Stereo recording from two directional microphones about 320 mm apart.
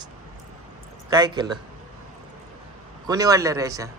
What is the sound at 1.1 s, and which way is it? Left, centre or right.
Speech, centre.